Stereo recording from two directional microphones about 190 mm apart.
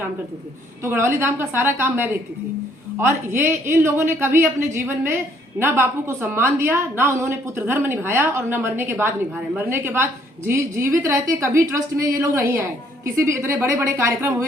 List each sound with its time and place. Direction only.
0.8 s a woman's voice: 15° right (ahead or behind)
3.1 s a woman's voice: 15° right (ahead or behind)